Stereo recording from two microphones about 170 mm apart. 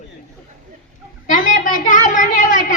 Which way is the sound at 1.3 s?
50° left (ahead or behind).